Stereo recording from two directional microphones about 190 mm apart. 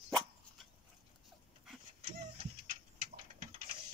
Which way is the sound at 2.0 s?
30° right (ahead or behind).